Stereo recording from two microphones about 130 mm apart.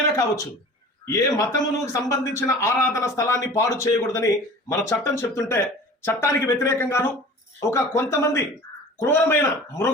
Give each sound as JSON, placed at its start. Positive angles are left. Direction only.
{"t": 1.0, "sound": "a man's voice", "side_deg": 25}